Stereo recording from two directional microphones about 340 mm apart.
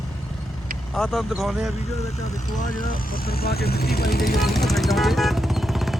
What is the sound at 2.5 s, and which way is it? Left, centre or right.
Speech, left.